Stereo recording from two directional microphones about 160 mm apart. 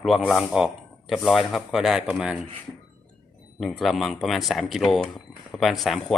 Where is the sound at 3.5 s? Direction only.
Centre (ahead or behind).